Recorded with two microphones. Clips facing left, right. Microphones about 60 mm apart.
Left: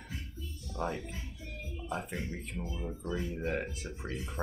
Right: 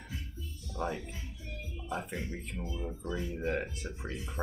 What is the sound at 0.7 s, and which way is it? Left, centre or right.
Speech, centre.